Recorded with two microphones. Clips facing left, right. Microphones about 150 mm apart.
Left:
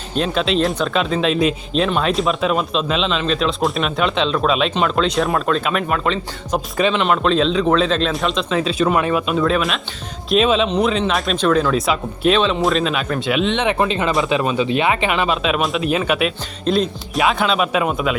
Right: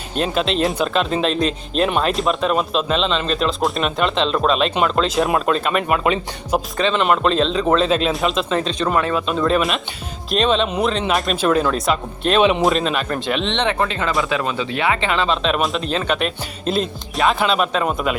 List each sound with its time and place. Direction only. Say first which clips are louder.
0.2 s speech: left 1 dB; centre (ahead or behind)
6.7 s speech: left 4 dB; 10° left (ahead or behind)
7.0 s speech: right 2 dB; centre (ahead or behind); by 9.3 s 15° left (ahead or behind)
9.3 s speech: even; centre (ahead or behind)
12.4 s speech: right 3 dB; 15° right (ahead or behind)
12.6 s speech: even; centre (ahead or behind)
13.7 s speech: left 3 dB; 20° left (ahead or behind); by 18.2 s centre (ahead or behind)